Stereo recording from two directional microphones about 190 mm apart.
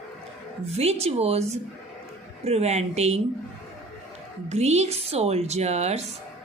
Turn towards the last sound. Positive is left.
turn(degrees=-35)  # may be behind; listen again after turning